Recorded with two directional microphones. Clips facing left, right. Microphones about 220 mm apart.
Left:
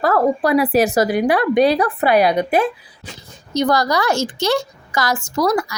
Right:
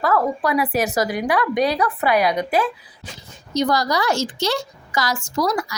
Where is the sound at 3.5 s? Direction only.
55° left (ahead or behind).